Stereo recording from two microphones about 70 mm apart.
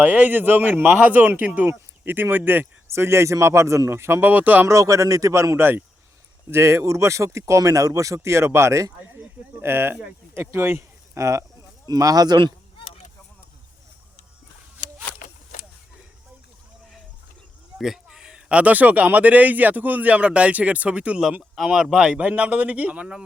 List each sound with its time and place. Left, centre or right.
0.0 s speech: right
2.8 s speech: right
4.3 s speech: right
4.6 s speech: right
9.6 s speech: right
10.8 s speech: right
11.9 s speech: right
17.7 s speech: centre
21.5 s speech: centre